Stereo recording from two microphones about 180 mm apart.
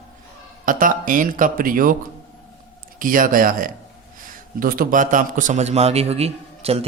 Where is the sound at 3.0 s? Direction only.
50° right (ahead or behind).